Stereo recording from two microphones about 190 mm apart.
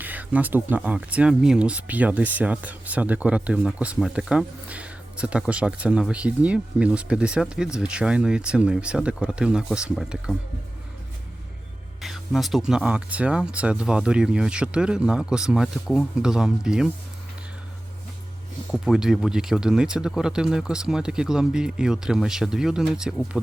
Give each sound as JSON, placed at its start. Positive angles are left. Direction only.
{"t": 0.0, "sound": "speech", "side_deg": -10}
{"t": 12.0, "sound": "speech", "side_deg": 0}
{"t": 18.7, "sound": "speech", "side_deg": 0}